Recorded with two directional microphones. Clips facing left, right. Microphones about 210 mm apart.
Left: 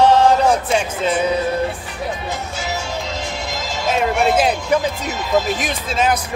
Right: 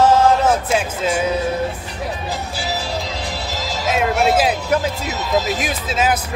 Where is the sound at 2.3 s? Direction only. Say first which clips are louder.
Even; 35° right (ahead or behind).